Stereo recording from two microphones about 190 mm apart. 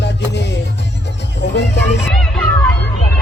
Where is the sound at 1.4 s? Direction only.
65° left (ahead or behind).